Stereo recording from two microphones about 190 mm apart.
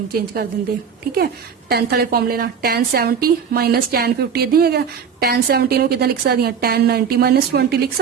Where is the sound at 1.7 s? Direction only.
55° right (ahead or behind).